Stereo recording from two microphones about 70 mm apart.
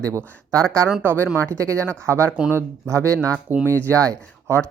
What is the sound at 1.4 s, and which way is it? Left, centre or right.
Speech, right.